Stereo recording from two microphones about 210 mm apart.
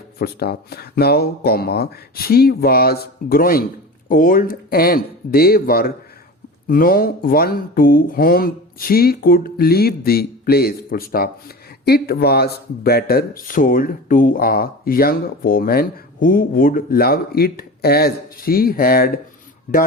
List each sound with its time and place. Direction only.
0.2 s speech: 50° left (ahead or behind)